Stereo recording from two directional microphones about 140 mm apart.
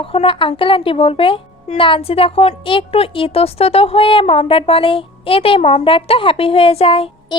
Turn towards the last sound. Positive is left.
turn(degrees=45)  # may be behind; listen again after turning